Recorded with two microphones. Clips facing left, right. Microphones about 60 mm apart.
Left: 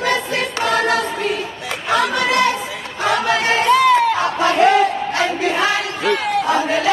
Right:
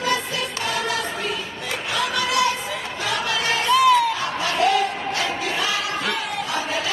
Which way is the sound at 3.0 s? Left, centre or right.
Left.